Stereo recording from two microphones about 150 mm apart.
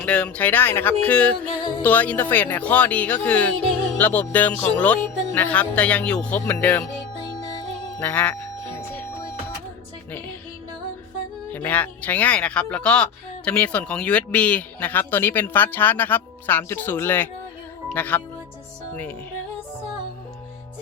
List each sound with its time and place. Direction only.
0.0 s speech: 10° left (ahead or behind)
7.2 s music: 25° left (ahead or behind)
7.9 s speech: 10° left (ahead or behind)
11.5 s speech: 10° left (ahead or behind)